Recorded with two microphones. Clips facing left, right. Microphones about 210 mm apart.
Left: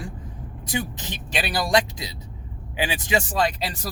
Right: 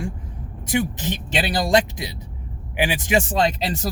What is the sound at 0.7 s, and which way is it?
Speech, 20° right (ahead or behind).